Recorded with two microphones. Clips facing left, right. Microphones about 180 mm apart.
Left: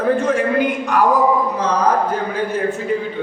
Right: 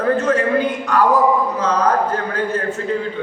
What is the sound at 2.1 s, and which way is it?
Speech, 10° left (ahead or behind).